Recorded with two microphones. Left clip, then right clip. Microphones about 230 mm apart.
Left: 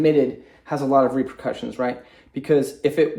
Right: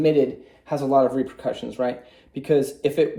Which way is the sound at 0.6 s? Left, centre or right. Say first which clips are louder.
Left 1 dB; left.